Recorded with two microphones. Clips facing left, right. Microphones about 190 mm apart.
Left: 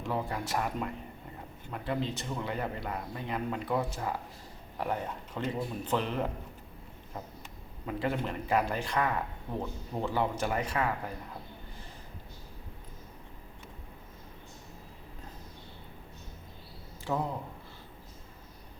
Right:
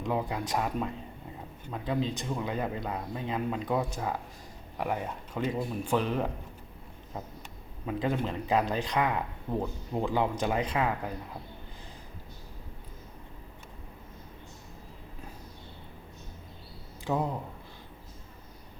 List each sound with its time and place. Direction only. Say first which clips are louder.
0.0 s speech: right 3 dB; 15° right (ahead or behind)
7.9 s speech: right 2 dB; 20° right (ahead or behind)
17.1 s speech: right 2 dB; 15° right (ahead or behind)